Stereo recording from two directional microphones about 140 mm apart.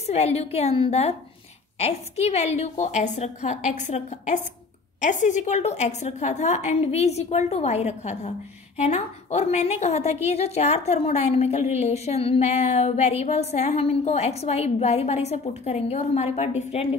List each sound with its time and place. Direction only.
0.0 s a woman's voice: 50° left (ahead or behind)